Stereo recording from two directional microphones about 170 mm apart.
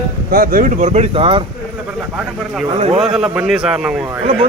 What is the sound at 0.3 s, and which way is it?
Speech, 55° right (ahead or behind).